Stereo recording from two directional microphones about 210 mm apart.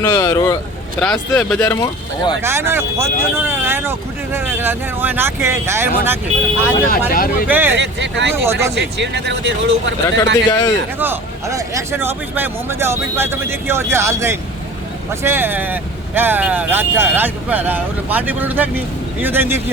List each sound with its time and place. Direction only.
0.0 s speech: 15° left (ahead or behind)
0.9 s speech: 5° left (ahead or behind)
1.7 s speech: 15° left (ahead or behind)
2.4 s speech: 10° right (ahead or behind)
7.1 s speech: 45° left (ahead or behind)
7.4 s speech: 10° right (ahead or behind)
7.8 s speech: 60° right (ahead or behind)
8.4 s speech: 10° right (ahead or behind)
8.7 s speech: 55° right (ahead or behind)
10.5 s speech: 15° left (ahead or behind)
11.0 s speech: 10° right (ahead or behind)